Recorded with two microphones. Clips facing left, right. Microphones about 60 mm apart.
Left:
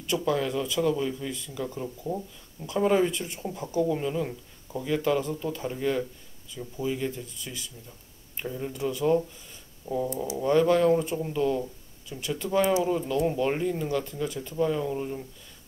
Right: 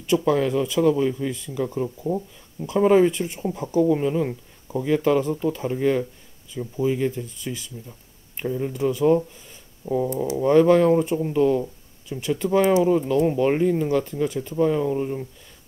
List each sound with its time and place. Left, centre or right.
0.3 s speech: right
8.4 s speech: right
9.8 s speech: right